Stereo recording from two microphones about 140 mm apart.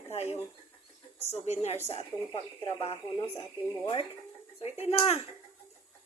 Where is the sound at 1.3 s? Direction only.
45° left (ahead or behind).